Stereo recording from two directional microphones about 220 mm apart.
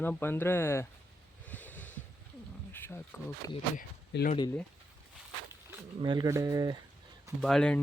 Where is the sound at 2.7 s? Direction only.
10° left (ahead or behind).